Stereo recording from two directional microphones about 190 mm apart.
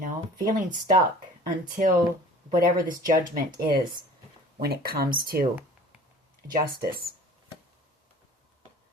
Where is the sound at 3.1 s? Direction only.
45° right (ahead or behind).